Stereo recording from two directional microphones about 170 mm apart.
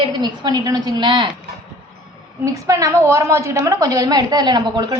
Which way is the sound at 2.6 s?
20° right (ahead or behind).